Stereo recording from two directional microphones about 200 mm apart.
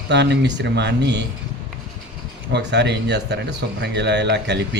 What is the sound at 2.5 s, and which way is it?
A man's voice, 60° right (ahead or behind).